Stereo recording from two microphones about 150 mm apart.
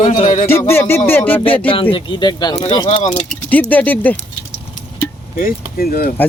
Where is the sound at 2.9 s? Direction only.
45° left (ahead or behind).